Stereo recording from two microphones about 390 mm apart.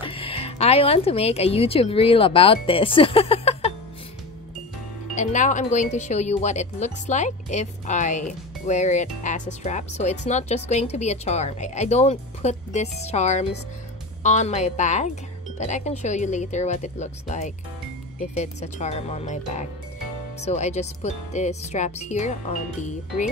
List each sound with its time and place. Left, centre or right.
0.0 s a woman's voice: centre
5.1 s speech: centre